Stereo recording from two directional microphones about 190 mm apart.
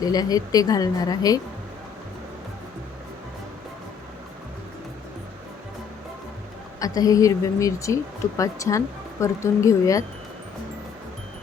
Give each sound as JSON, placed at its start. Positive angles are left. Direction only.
{"t": 0.0, "sound": "a woman's voice", "side_deg": 20}
{"t": 6.7, "sound": "a woman's voice", "side_deg": 20}